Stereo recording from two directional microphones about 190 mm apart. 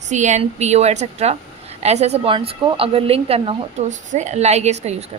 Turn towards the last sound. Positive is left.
turn(degrees=-35)  # may be behind; listen again after turning